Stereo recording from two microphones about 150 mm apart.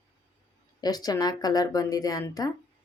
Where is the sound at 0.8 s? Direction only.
25° left (ahead or behind).